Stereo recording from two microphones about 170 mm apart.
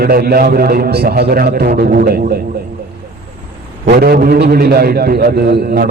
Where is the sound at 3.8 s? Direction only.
65° right (ahead or behind).